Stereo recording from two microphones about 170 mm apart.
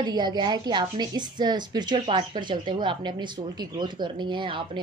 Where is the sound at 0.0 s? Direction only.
25° right (ahead or behind).